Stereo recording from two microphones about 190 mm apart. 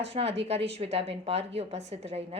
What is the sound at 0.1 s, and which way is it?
A woman's voice, 35° right (ahead or behind).